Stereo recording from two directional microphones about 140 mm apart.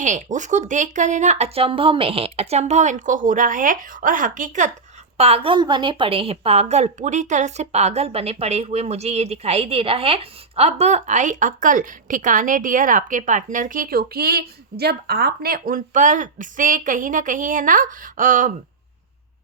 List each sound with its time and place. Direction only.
0.0 s speech: 60° right (ahead or behind)
5.1 s a woman's voice: 45° right (ahead or behind); by 18.5 s 70° right (ahead or behind)